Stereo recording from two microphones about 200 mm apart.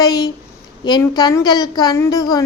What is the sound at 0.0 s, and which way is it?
A woman's voice, 20° left (ahead or behind).